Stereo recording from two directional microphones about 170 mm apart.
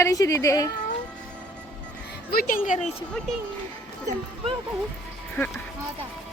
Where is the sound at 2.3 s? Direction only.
55° left (ahead or behind).